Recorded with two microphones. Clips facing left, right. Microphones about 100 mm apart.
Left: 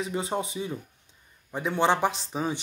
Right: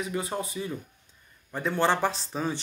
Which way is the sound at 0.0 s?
25° left (ahead or behind).